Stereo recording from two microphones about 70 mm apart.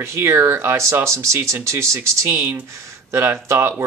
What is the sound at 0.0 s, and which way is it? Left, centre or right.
Speech, right.